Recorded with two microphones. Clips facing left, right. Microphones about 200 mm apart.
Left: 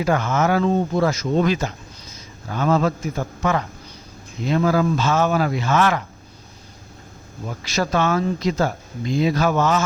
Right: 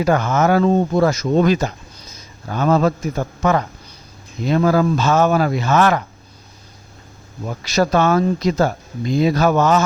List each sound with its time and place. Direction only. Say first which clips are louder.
0.0 s speech: right 3 dB; 45° right (ahead or behind)
7.8 s speech: right 5 dB; 40° right (ahead or behind)